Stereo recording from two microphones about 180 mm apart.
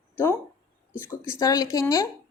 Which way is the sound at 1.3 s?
20° left (ahead or behind).